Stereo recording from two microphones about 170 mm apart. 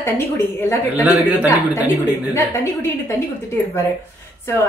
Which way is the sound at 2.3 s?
15° left (ahead or behind).